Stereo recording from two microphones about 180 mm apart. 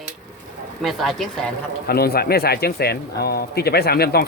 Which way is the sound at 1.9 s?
60° left (ahead or behind).